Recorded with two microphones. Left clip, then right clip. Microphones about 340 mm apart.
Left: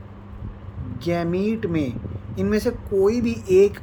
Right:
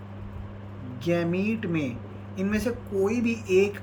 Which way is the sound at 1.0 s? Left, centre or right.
Centre.